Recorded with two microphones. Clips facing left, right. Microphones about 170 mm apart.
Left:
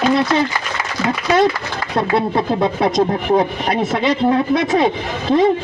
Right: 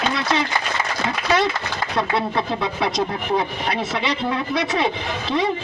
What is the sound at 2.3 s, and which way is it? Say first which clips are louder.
Speech: left 6 dB; 50° left (ahead or behind).